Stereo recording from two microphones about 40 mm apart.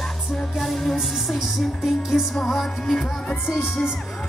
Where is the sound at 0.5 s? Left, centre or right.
Centre.